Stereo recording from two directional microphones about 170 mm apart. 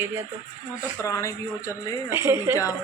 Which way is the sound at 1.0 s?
20° left (ahead or behind).